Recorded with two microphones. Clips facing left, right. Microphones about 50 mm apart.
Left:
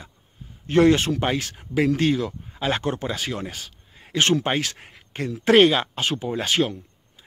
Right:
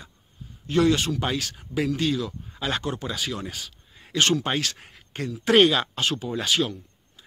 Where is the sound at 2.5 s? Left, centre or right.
Left.